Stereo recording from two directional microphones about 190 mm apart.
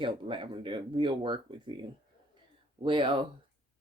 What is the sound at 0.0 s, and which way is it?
Speech, 25° right (ahead or behind).